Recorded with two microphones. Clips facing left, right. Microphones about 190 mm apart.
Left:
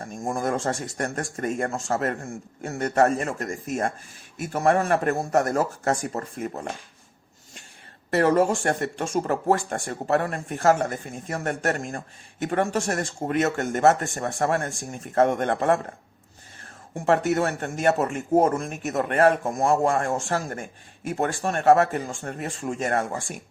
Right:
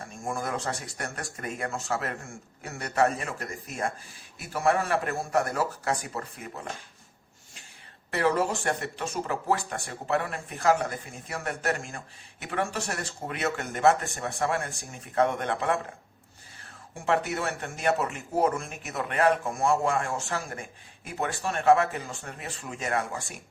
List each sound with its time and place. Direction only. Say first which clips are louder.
0.0 s a sound: left 6 dB; 40° left (ahead or behind)
0.9 s speech: left 8 dB; 45° left (ahead or behind)
8.1 s speech: left 6 dB; 45° left (ahead or behind)
17.1 s speech: left 6 dB; 45° left (ahead or behind)